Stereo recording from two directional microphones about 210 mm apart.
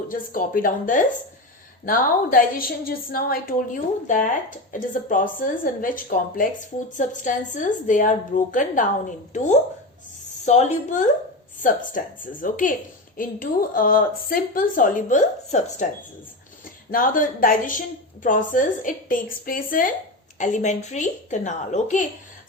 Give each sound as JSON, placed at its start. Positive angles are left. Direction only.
{"t": 0.1, "sound": "a woman's voice", "side_deg": 40}